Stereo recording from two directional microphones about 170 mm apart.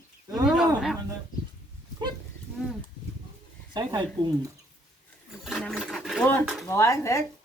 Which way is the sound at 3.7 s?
20° right (ahead or behind).